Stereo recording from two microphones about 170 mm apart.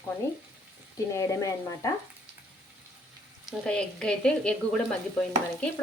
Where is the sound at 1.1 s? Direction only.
20° left (ahead or behind).